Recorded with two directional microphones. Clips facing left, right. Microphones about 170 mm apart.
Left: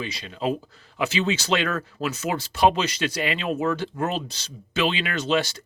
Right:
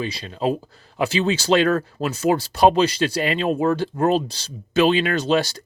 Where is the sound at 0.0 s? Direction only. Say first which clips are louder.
Right 4 dB; 35° right (ahead or behind).